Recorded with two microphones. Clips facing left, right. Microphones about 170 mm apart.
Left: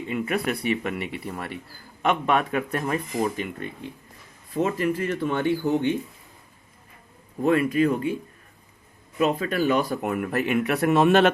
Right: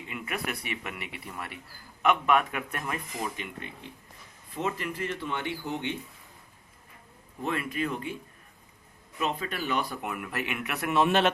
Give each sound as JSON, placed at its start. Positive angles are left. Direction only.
{"t": 0.1, "sound": "speech", "side_deg": 35}
{"t": 7.4, "sound": "speech", "side_deg": 45}
{"t": 9.1, "sound": "speech", "side_deg": 40}